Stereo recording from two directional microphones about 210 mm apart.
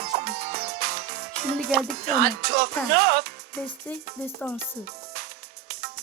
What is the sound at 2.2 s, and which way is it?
Speech, 50° right (ahead or behind).